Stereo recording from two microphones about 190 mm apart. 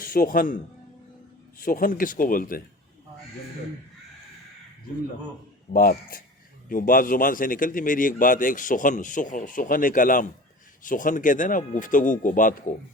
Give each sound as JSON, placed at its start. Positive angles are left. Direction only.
{"t": 0.0, "sound": "speech", "side_deg": 50}
{"t": 1.6, "sound": "a man's voice", "side_deg": 50}
{"t": 5.7, "sound": "a man's voice", "side_deg": 50}